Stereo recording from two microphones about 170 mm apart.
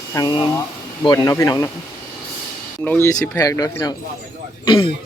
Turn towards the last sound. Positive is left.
turn(degrees=30)  # may be behind; listen again after turning